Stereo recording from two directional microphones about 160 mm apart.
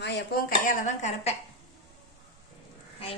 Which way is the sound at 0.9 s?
45° left (ahead or behind).